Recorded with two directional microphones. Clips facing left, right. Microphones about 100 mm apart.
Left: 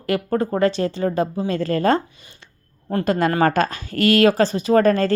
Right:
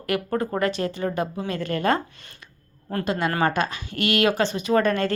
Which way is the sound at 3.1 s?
45° left (ahead or behind).